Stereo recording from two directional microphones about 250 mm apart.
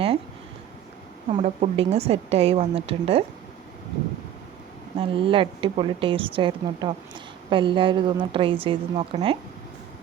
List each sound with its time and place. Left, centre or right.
1.3 s a woman's voice: right
4.9 s a woman's voice: right